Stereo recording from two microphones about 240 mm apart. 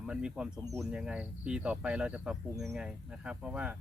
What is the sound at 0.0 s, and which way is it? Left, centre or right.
Speech, centre.